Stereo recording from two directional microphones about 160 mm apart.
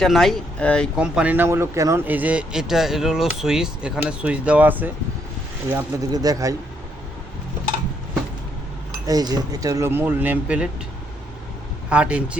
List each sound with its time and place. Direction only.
0.0 s speech: centre (ahead or behind)
0.9 s speech: 5° right (ahead or behind)
5.7 s speech: 20° right (ahead or behind)
9.0 s speech: 25° right (ahead or behind)
11.9 s speech: 5° right (ahead or behind)